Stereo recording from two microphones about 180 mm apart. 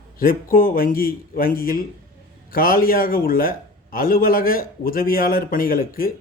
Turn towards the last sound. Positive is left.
turn(degrees=50)  # may be behind; listen again after turning